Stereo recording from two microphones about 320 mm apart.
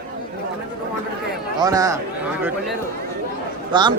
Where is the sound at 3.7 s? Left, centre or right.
Centre.